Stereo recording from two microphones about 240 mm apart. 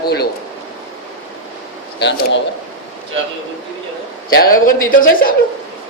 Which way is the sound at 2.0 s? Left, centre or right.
Left.